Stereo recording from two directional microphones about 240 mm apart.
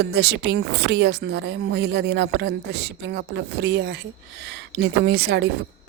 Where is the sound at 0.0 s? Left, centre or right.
Right.